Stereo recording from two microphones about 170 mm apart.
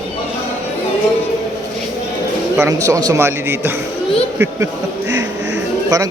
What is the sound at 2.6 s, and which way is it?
Speech, 20° right (ahead or behind).